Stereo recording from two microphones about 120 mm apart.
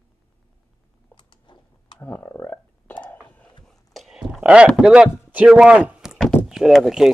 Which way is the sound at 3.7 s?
Centre (ahead or behind).